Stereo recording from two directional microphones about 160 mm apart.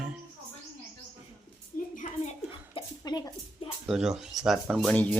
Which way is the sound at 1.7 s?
60° left (ahead or behind).